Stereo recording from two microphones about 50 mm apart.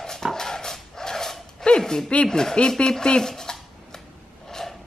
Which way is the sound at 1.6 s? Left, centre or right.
Centre.